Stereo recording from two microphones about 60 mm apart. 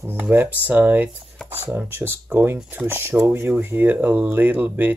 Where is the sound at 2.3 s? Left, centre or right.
Right.